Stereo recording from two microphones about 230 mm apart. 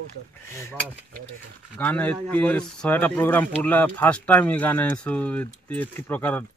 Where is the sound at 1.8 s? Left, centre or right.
Centre.